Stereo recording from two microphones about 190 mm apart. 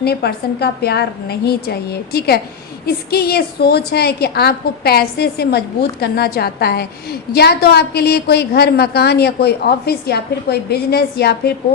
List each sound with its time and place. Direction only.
0.0 s a woman's voice: 55° left (ahead or behind)